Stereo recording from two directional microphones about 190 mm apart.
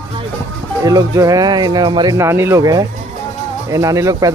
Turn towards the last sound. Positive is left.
turn(degrees=-15)  # may be behind; listen again after turning